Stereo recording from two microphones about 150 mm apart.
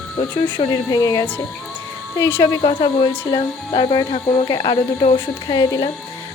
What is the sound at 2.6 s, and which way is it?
Speech, 35° left (ahead or behind).